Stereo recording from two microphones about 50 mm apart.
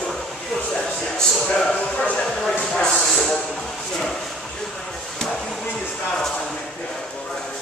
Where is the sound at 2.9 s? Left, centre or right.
Centre.